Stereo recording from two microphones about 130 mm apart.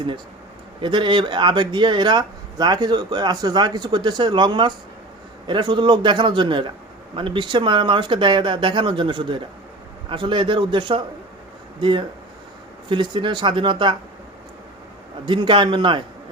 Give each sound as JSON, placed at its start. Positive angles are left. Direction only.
{"t": 0.8, "sound": "speech", "side_deg": -40}
{"t": 15.3, "sound": "speech", "side_deg": -40}